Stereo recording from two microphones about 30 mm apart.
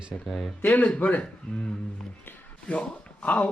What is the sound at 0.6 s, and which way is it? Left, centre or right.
Speech, left.